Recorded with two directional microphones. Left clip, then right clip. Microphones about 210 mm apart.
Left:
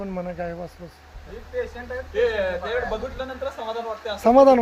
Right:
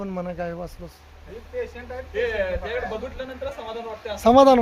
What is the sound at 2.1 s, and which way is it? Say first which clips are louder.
Speech: left 2 dB; 5° right (ahead or behind).